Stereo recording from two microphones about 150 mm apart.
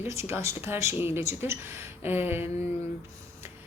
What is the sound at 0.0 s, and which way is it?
Speech, 15° right (ahead or behind).